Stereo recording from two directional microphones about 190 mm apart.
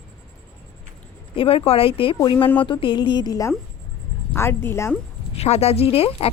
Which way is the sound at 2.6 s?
25° left (ahead or behind).